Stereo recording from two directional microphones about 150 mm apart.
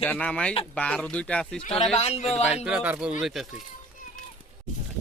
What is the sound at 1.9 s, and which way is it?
Speech, 45° left (ahead or behind).